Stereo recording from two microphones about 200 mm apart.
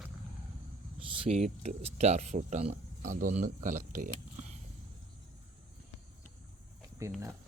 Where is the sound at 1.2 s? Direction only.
30° right (ahead or behind).